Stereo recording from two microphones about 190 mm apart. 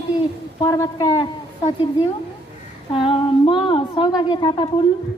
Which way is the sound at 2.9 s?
25° left (ahead or behind).